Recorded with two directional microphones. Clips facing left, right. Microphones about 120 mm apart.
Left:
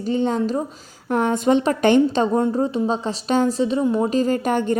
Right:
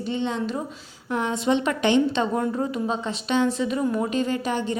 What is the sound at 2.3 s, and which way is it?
A woman's voice, 30° left (ahead or behind).